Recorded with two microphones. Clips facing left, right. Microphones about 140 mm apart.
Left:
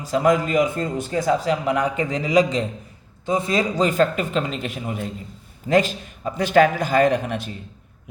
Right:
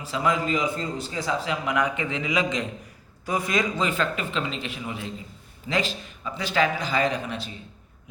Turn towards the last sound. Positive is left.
turn(degrees=55)  # may be behind; listen again after turning